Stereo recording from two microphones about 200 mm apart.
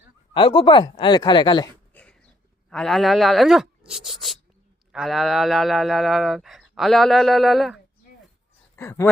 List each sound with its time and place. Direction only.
0.3 s speech: 25° left (ahead or behind)
1.9 s cough: 5° left (ahead or behind)
2.6 s speech: centre (ahead or behind)
8.7 s speech: 15° left (ahead or behind)